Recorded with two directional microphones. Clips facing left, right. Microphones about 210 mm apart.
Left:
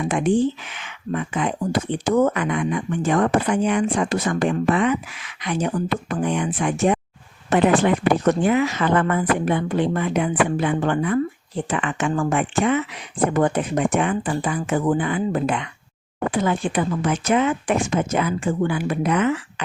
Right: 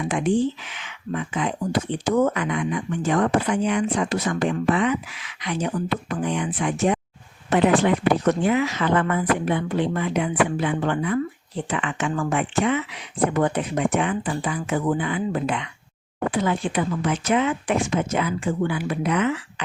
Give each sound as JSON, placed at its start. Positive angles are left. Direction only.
{"t": 0.1, "sound": "speech", "side_deg": 50}